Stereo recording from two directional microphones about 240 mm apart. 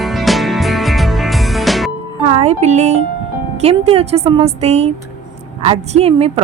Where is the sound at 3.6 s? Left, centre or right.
Right.